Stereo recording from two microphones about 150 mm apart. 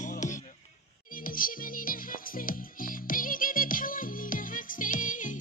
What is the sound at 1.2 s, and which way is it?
Music, 70° left (ahead or behind).